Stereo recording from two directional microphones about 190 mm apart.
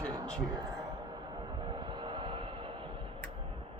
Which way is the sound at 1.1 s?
20° right (ahead or behind).